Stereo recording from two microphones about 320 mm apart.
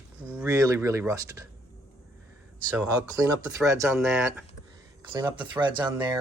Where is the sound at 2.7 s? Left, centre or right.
Centre.